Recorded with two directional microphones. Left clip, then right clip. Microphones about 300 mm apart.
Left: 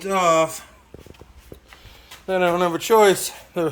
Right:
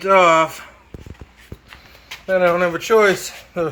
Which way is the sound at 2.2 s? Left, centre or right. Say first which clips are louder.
Right 4 dB; centre.